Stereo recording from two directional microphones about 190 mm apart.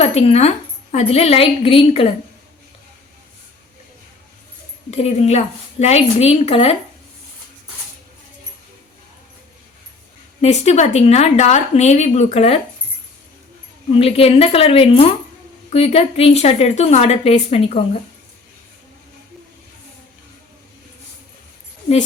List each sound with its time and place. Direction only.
0.0 s a woman's voice: 35° left (ahead or behind)
4.9 s a woman's voice: 35° left (ahead or behind)
10.4 s a woman's voice: 35° left (ahead or behind)
13.9 s a woman's voice: 30° left (ahead or behind)